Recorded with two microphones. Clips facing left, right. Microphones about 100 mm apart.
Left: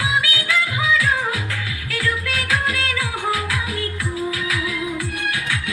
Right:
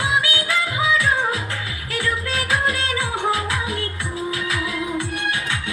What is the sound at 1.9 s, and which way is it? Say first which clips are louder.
Music: even; 25° right (ahead or behind).